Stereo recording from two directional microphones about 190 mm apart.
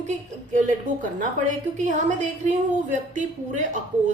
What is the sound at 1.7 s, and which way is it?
A woman's voice, 40° right (ahead or behind).